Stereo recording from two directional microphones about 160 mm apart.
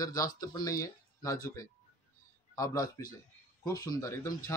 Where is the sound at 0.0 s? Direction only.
20° left (ahead or behind).